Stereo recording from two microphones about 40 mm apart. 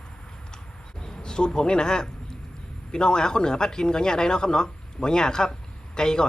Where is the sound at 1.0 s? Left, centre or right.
Centre.